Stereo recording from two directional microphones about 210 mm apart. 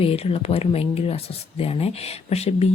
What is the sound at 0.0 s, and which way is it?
Speech, 30° left (ahead or behind).